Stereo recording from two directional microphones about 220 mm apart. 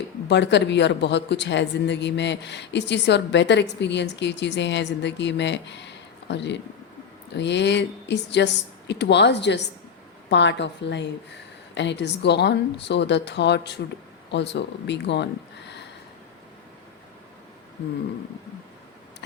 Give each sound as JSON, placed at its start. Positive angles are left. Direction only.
{"t": 0.3, "sound": "speech", "side_deg": 50}